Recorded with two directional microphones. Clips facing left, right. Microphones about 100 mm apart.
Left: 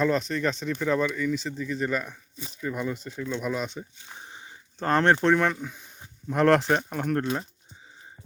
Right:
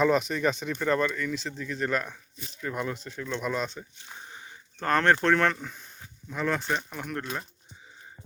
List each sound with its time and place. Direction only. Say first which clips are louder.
0.0 s speech: right 1 dB; 10° right (ahead or behind)
4.3 s speech: even; 25° left (ahead or behind); by 5.8 s 5° left (ahead or behind)
6.3 s speech: left 9 dB; 85° left
6.7 s speech: left 6 dB; 50° left (ahead or behind)